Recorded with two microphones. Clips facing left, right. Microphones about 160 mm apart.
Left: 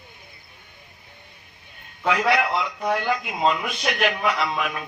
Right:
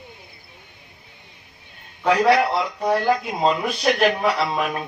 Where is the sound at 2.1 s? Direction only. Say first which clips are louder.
Right 4 dB; 35° right (ahead or behind).